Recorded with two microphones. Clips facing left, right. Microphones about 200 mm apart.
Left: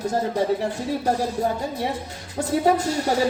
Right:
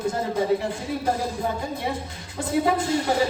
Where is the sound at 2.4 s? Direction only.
40° left (ahead or behind).